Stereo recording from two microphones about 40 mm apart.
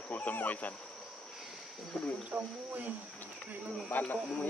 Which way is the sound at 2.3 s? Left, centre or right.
Right.